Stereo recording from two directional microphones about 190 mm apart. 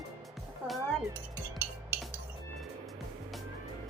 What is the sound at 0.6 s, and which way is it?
Speech, 5° right (ahead or behind).